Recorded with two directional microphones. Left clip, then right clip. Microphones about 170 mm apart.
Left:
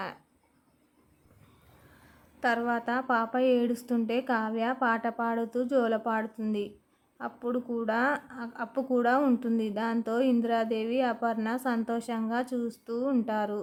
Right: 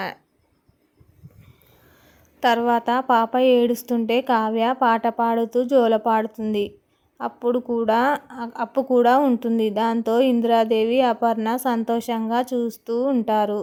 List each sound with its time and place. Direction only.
2.4 s speech: 25° right (ahead or behind)